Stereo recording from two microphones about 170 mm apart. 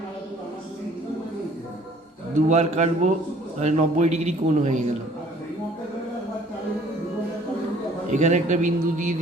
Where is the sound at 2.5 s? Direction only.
40° right (ahead or behind).